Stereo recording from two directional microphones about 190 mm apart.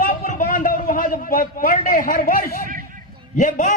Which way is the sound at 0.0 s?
45° left (ahead or behind).